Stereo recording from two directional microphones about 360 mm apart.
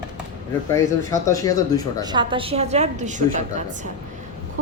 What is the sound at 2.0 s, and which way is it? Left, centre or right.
A woman's voice, centre.